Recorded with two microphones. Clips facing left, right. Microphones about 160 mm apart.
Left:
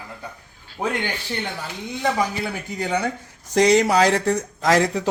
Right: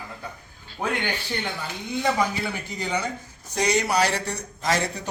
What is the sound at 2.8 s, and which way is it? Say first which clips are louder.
Speech: left 5 dB; 60° left (ahead or behind).